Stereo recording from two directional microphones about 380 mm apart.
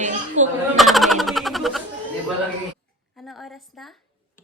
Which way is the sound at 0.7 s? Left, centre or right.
Centre.